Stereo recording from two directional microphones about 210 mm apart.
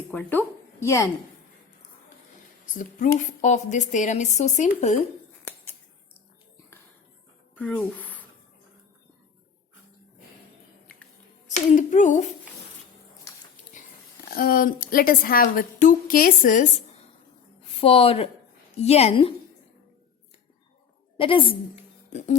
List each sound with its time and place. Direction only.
0.1 s speech: 10° left (ahead or behind)
3.2 s speech: 35° left (ahead or behind)
7.5 s speech: 5° left (ahead or behind)
11.4 s speech: 35° left (ahead or behind)
14.3 s a woman's voice: 45° left (ahead or behind)
17.7 s speech: 25° left (ahead or behind)
21.2 s speech: 25° left (ahead or behind)